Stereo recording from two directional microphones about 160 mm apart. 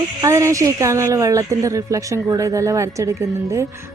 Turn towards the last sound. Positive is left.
turn(degrees=-20)  # may be behind; listen again after turning